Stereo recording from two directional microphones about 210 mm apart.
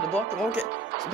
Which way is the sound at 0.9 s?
50° right (ahead or behind).